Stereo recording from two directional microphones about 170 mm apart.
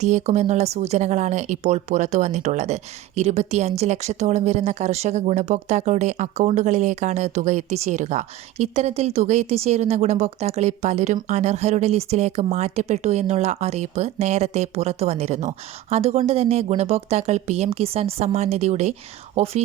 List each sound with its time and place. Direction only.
0.0 s speech: 40° right (ahead or behind)